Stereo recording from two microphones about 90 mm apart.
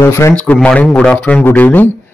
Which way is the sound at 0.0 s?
30° left (ahead or behind).